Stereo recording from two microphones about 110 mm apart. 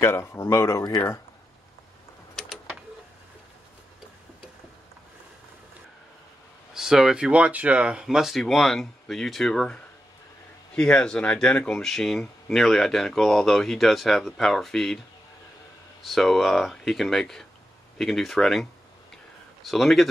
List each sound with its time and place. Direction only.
0.0 s speech: 25° left (ahead or behind)
2.4 s a sound: 5° left (ahead or behind)
6.7 s speech: 5° right (ahead or behind)
10.8 s speech: 10° left (ahead or behind)
16.0 s speech: centre (ahead or behind)